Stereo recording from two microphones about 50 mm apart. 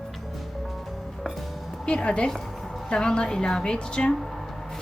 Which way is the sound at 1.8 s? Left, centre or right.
Centre.